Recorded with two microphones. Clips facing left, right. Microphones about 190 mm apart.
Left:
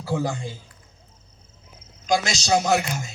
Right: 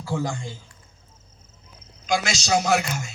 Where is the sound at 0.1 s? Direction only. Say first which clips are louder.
Left 2 dB; 15° left (ahead or behind).